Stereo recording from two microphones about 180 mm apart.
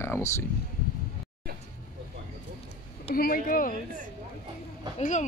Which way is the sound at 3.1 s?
55° left (ahead or behind).